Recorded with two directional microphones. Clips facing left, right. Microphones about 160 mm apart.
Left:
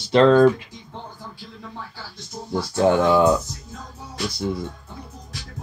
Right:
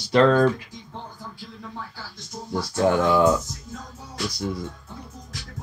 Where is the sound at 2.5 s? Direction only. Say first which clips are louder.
Left 3 dB; 25° left (ahead or behind).